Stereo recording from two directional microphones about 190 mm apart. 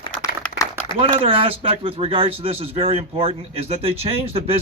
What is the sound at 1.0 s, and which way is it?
Speech, 30° right (ahead or behind).